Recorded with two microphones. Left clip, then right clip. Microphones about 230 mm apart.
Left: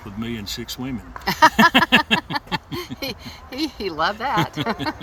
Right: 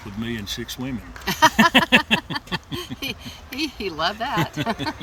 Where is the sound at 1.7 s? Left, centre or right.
Centre.